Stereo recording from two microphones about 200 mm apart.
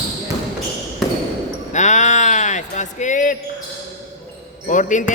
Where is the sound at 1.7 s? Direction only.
35° left (ahead or behind).